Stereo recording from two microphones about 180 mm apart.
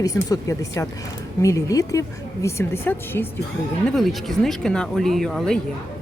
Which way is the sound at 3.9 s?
Centre (ahead or behind).